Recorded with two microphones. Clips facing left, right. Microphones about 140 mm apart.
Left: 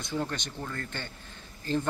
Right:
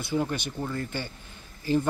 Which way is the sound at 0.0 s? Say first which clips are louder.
Right 5 dB; 10° right (ahead or behind).